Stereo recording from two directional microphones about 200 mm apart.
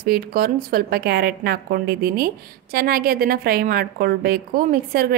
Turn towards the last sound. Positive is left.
turn(degrees=-50)  # may be behind; listen again after turning